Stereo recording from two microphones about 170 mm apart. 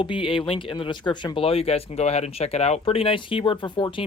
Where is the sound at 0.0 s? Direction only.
30° left (ahead or behind).